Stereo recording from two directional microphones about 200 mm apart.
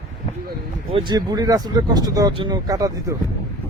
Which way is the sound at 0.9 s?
20° right (ahead or behind).